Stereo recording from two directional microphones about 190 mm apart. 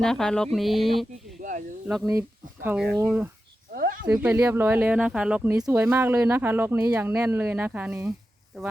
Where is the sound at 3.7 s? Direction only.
50° right (ahead or behind).